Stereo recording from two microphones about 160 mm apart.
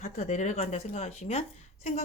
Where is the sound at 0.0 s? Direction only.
50° left (ahead or behind).